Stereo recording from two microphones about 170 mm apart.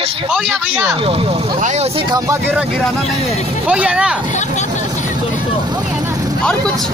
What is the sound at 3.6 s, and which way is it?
Speech, 5° right (ahead or behind).